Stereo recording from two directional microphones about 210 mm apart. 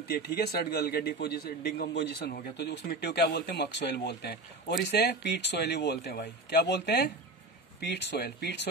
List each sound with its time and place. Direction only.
0.1 s a man's voice: 50° left (ahead or behind)